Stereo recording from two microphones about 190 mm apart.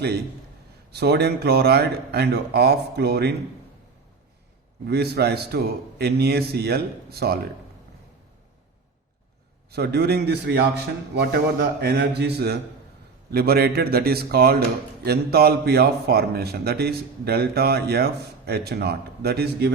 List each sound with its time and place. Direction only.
0.9 s a man's voice: 60° right (ahead or behind)
4.9 s a man's voice: 60° right (ahead or behind)
9.7 s a man's voice: 60° right (ahead or behind)